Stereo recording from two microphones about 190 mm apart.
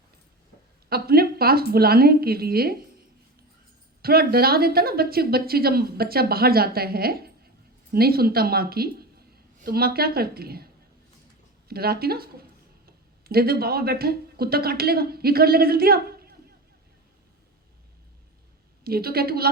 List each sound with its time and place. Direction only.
0.9 s speech: 55° right (ahead or behind)
4.0 s a woman's voice: 55° right (ahead or behind)
11.7 s speech: 55° right (ahead or behind)
18.9 s speech: 55° right (ahead or behind)